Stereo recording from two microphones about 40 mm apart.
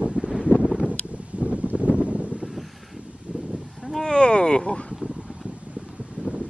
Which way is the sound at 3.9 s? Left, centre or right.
Centre.